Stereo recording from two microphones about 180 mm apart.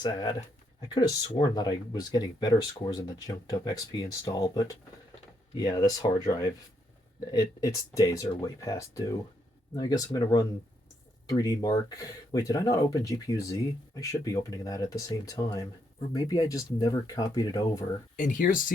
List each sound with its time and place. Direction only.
0.0 s speech: 20° left (ahead or behind)
1.4 s speech: 25° left (ahead or behind)
18.2 s speech: 45° left (ahead or behind)